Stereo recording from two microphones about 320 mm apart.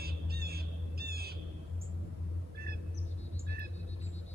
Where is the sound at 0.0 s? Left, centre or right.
Right.